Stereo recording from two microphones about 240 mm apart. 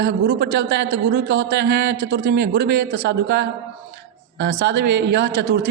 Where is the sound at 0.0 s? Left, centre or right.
Right.